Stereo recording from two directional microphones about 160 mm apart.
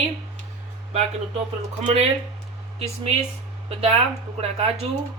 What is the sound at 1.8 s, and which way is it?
Speech, 40° right (ahead or behind).